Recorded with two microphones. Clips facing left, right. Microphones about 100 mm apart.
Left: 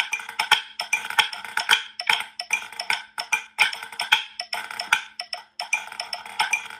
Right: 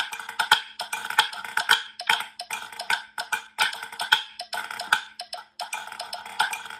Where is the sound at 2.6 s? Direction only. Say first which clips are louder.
Right 4 dB; 15° right (ahead or behind).